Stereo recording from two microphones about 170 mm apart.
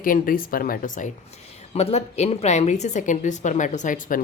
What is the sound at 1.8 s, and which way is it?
A woman's voice, 40° left (ahead or behind).